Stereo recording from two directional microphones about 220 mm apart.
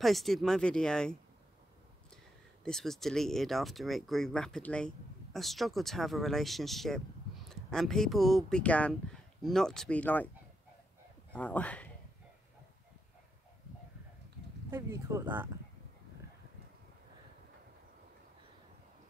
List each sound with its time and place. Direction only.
0.0 s speech: centre (ahead or behind)
2.6 s speech: centre (ahead or behind)
11.3 s speech: 5° left (ahead or behind)
14.7 s speech: 15° right (ahead or behind)